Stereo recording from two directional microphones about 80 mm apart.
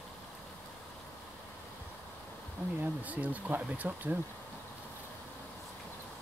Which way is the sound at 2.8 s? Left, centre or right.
Centre.